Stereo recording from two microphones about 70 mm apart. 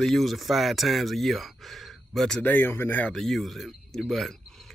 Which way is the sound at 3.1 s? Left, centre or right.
Centre.